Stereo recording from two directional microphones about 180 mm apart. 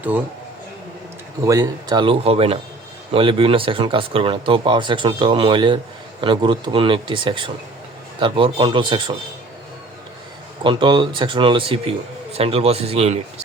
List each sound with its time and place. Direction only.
1.5 s speech: 20° right (ahead or behind)
10.6 s a man's voice: 25° right (ahead or behind)